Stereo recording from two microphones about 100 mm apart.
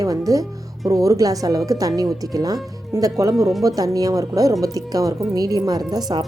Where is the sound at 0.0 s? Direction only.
35° right (ahead or behind).